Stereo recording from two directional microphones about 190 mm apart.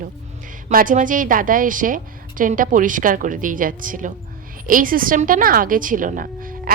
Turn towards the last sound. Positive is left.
turn(degrees=-45)  # may be behind; listen again after turning